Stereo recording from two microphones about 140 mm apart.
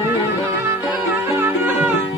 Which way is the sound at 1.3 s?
15° right (ahead or behind).